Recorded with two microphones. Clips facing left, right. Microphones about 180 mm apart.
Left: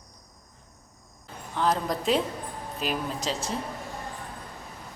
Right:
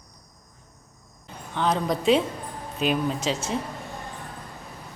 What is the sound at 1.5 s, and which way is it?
Speech, centre (ahead or behind).